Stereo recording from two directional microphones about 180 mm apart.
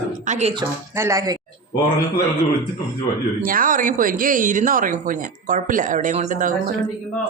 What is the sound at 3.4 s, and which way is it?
Speech, 50° right (ahead or behind).